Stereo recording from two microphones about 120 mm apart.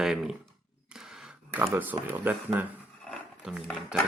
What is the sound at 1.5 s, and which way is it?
Speech, 15° right (ahead or behind).